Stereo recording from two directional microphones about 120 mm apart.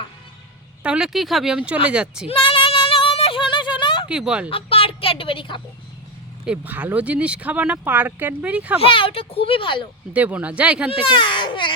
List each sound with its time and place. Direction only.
0.8 s speech: 5° right (ahead or behind)
2.2 s female singing: 50° left (ahead or behind)
4.1 s speech: 10° right (ahead or behind)
4.4 s a woman's voice: 50° left (ahead or behind)
6.4 s speech: 10° right (ahead or behind)
8.8 s speech: 45° left (ahead or behind)
10.1 s speech: 10° right (ahead or behind)
11.0 s a child's voice: 45° left (ahead or behind)